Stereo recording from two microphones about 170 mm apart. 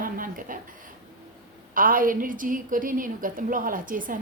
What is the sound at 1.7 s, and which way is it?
A woman's voice, 55° right (ahead or behind).